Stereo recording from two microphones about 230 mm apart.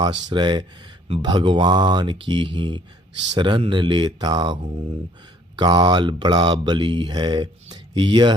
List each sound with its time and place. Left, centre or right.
0.0 s speech: centre